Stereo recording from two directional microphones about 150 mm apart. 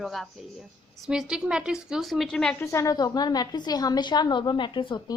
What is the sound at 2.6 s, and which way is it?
A woman's voice, 20° left (ahead or behind).